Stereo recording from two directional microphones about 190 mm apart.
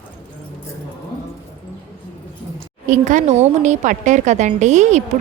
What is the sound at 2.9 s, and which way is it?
A woman's voice, 40° right (ahead or behind).